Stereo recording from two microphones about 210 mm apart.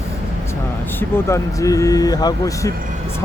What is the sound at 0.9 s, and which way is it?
Speech, 15° left (ahead or behind).